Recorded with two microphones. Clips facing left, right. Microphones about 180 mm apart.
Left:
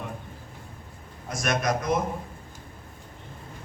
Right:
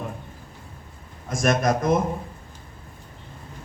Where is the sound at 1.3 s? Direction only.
50° right (ahead or behind).